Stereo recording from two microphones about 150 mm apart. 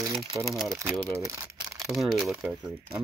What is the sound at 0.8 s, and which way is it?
Speech, 5° left (ahead or behind).